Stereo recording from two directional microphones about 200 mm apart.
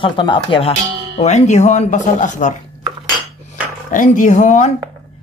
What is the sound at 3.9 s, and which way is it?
Speech, 40° left (ahead or behind).